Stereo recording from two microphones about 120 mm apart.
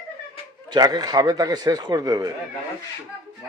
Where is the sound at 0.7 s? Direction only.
35° right (ahead or behind).